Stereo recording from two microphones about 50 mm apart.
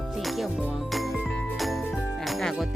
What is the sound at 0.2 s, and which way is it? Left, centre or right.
Music, centre.